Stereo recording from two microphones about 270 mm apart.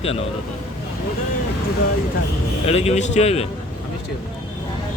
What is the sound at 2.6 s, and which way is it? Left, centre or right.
Speech, left.